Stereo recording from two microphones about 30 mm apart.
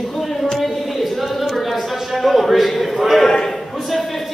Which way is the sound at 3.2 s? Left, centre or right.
Centre.